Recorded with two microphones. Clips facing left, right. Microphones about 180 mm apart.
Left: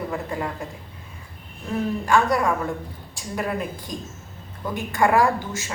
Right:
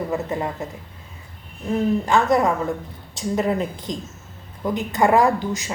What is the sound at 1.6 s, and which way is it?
A woman's voice, 20° right (ahead or behind).